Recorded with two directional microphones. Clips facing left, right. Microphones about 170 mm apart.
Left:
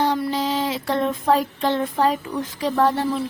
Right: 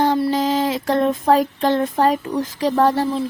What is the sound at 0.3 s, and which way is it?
Speech, 45° right (ahead or behind).